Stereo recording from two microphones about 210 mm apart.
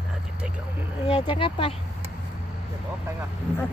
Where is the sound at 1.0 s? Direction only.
25° left (ahead or behind).